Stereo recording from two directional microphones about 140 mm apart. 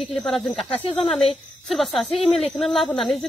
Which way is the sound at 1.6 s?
Centre (ahead or behind).